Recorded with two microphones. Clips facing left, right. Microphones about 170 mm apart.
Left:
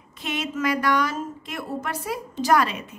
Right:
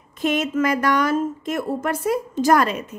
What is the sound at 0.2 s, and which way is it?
A woman's voice, 45° right (ahead or behind).